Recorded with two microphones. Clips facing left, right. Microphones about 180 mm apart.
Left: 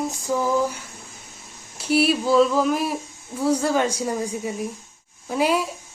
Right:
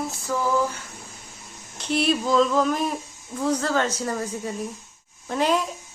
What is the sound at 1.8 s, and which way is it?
Speech, 5° left (ahead or behind).